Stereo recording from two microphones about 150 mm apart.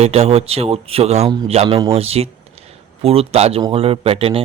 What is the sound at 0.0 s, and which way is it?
Speech, 40° right (ahead or behind).